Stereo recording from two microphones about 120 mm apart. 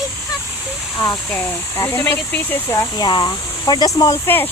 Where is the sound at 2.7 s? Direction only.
35° left (ahead or behind).